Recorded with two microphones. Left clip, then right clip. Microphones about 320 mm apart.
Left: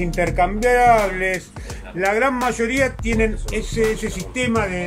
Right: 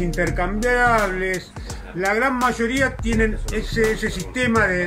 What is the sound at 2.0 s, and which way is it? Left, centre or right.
Speech, left.